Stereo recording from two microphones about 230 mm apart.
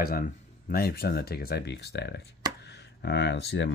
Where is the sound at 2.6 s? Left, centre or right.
Left.